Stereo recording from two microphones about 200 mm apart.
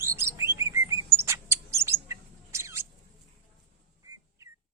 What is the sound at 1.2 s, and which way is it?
Bird, 15° right (ahead or behind).